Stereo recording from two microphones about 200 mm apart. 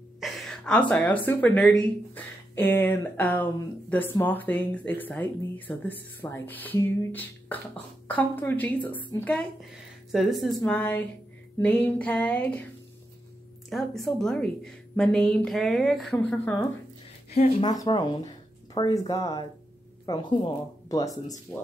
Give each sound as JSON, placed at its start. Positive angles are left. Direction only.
{"t": 0.2, "sound": "a woman's voice", "side_deg": 0}
{"t": 13.7, "sound": "a woman's voice", "side_deg": 0}
{"t": 17.4, "sound": "a woman's voice", "side_deg": 25}